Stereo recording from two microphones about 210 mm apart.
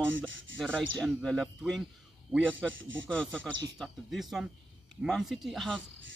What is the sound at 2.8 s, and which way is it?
Speech, 65° right (ahead or behind).